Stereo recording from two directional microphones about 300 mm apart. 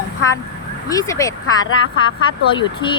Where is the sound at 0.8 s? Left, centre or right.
Centre.